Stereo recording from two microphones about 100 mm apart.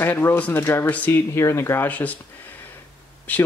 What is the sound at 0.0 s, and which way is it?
Speech, 20° left (ahead or behind).